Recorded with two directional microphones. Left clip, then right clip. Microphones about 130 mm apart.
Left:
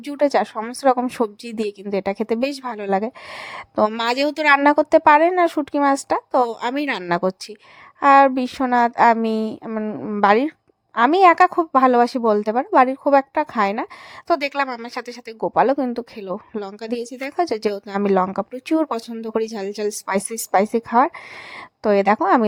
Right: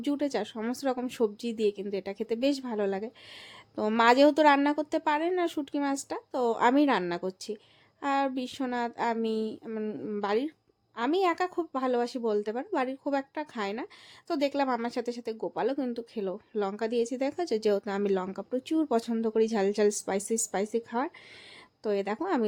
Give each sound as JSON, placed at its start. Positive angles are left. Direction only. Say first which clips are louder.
{"t": 0.0, "sound": "a woman's voice", "louder": "left 12 dB", "side_deg": 40}
{"t": 9.6, "sound": "a sound", "louder": "left 8 dB", "side_deg": 25}
{"t": 10.2, "sound": "a woman's voice", "louder": "left 15 dB", "side_deg": 50}